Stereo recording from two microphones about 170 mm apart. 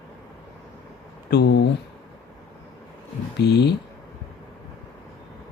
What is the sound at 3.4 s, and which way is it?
Speech, 75° left (ahead or behind).